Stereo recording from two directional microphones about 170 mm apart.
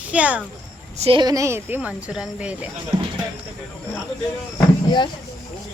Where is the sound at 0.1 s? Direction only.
10° right (ahead or behind).